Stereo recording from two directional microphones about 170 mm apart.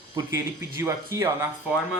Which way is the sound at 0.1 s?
20° right (ahead or behind).